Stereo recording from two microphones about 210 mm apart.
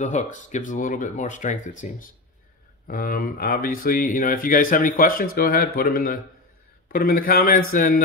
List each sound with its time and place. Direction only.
0.0 s speech: 35° left (ahead or behind)